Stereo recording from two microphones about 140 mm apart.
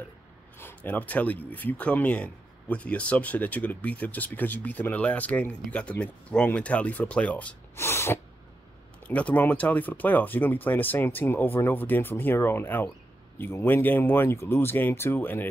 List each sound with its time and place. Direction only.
0.6 s speech: 15° left (ahead or behind)